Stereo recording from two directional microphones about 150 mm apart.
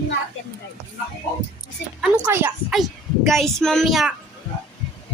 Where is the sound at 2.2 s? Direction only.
15° right (ahead or behind).